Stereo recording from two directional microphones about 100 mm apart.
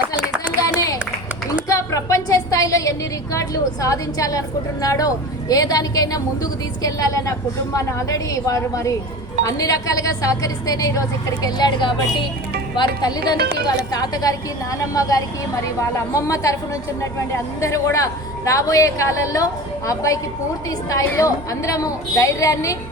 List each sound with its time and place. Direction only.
1.6 s a sound: 35° left (ahead or behind)
3.3 s a woman's voice: 35° left (ahead or behind)
21.2 s a woman's voice: 35° left (ahead or behind)